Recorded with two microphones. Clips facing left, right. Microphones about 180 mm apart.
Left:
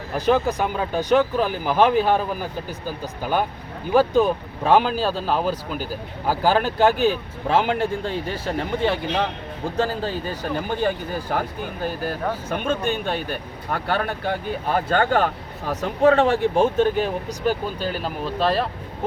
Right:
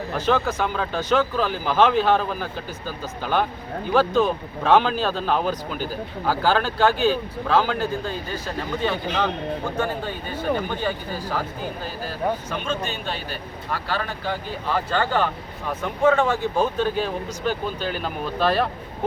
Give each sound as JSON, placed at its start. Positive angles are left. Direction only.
{"t": 0.1, "sound": "speech", "side_deg": 15}
{"t": 9.6, "sound": "speech", "side_deg": 40}
{"t": 16.0, "sound": "speech", "side_deg": 35}
{"t": 18.3, "sound": "speech", "side_deg": 30}